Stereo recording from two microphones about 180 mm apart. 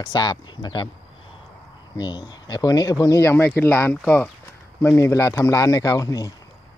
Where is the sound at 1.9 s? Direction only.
25° left (ahead or behind).